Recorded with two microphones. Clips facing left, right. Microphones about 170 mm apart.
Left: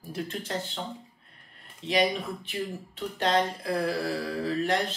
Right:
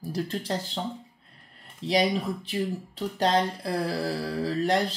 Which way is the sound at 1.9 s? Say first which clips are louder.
Right 2 dB; 35° right (ahead or behind).